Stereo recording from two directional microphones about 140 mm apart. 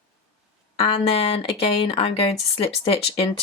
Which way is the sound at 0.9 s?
45° left (ahead or behind).